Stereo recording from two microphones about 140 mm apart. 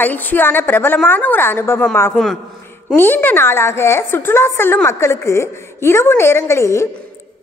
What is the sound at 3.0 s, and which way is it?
A woman's voice, 15° left (ahead or behind).